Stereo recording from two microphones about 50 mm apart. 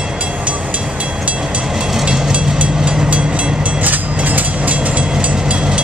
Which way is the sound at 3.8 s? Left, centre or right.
Right.